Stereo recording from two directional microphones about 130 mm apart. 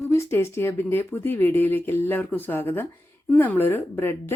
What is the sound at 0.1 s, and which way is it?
Speech, 20° left (ahead or behind).